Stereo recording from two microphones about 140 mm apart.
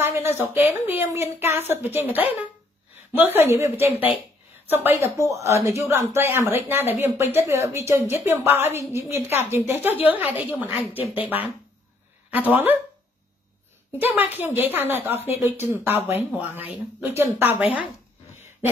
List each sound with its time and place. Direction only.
0.0 s a sound: 15° right (ahead or behind)
0.6 s a woman's voice: 15° right (ahead or behind)
13.9 s a woman's voice: 15° right (ahead or behind)